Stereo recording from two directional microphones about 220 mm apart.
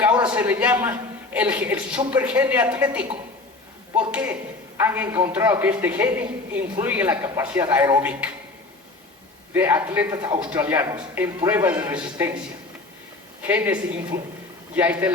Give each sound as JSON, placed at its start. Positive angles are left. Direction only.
{"t": 0.3, "sound": "a man's voice", "side_deg": -5}
{"t": 9.5, "sound": "a man's voice", "side_deg": -10}
{"t": 13.5, "sound": "a man's voice", "side_deg": -10}